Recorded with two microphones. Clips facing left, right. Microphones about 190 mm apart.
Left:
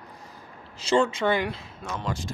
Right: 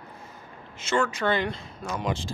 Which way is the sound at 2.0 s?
25° right (ahead or behind).